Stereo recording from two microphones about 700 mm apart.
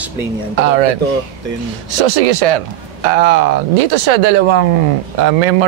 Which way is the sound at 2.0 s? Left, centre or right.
Right.